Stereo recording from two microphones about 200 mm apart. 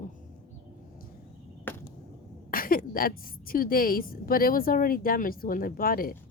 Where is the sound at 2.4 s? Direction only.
45° left (ahead or behind).